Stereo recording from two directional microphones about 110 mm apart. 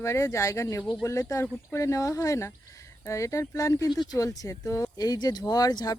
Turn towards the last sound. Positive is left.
turn(degrees=35)  # may be behind; listen again after turning